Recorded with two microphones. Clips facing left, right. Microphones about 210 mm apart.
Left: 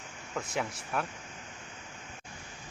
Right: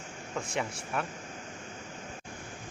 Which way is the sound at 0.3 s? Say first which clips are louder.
Even; centre (ahead or behind).